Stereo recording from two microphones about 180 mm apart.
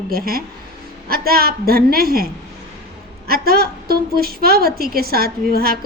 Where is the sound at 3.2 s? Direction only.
60° right (ahead or behind).